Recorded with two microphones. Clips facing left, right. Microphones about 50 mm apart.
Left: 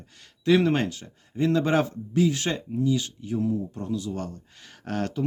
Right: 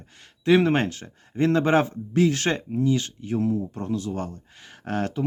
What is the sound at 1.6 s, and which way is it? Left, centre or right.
Speech, right.